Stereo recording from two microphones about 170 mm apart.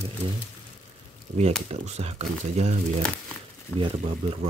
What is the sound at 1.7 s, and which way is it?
Speech, 40° right (ahead or behind).